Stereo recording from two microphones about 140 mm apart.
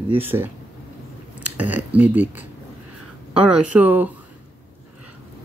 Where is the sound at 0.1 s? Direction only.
15° right (ahead or behind).